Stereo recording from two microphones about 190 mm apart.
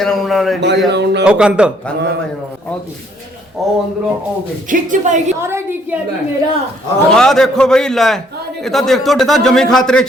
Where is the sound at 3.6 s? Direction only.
Centre (ahead or behind).